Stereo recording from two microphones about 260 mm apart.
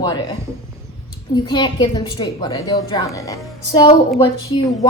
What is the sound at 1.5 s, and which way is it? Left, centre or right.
A woman's voice, centre.